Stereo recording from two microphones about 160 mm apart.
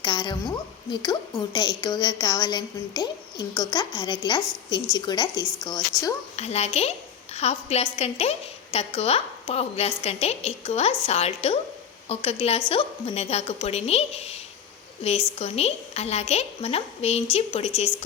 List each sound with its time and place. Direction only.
0.0 s a woman's voice: 25° left (ahead or behind)
6.3 s a woman's voice: 40° left (ahead or behind)